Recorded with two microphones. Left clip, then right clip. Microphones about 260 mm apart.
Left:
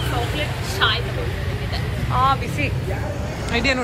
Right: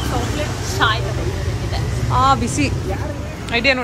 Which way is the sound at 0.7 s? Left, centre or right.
Right.